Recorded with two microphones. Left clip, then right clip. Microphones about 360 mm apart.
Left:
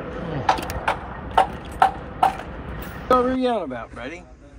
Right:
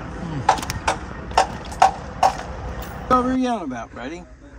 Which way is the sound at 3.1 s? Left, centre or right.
Centre.